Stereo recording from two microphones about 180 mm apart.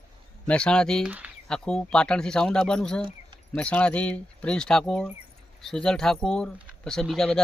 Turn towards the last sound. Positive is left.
turn(degrees=0)  # may be behind; listen again after turning